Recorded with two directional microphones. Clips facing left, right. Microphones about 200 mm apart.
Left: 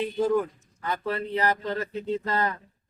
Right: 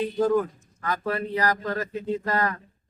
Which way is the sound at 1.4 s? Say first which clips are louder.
Right 1 dB; 25° left (ahead or behind).